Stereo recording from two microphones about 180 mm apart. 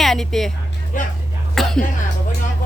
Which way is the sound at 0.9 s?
45° left (ahead or behind).